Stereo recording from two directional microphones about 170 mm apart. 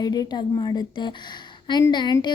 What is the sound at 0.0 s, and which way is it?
Speech, 25° left (ahead or behind).